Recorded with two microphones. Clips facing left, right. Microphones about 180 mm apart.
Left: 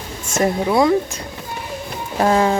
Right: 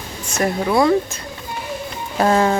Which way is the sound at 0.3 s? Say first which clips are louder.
Left 2 dB; 25° left (ahead or behind).